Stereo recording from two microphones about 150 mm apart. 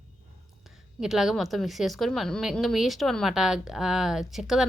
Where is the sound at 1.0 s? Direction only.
Centre (ahead or behind).